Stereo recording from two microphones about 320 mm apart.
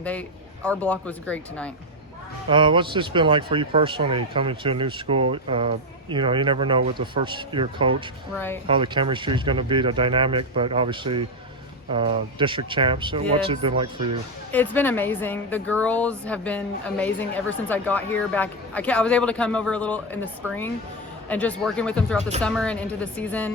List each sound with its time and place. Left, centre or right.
0.0 s speech: centre
2.5 s speech: centre
14.5 s speech: centre